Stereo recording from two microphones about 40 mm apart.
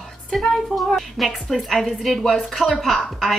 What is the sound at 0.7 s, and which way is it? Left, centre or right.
A woman's voice, centre.